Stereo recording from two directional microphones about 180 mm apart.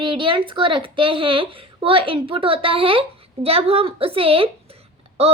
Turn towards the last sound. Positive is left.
turn(degrees=-35)  # may be behind; listen again after turning